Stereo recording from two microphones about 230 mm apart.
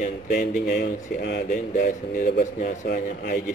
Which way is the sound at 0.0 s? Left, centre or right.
Left.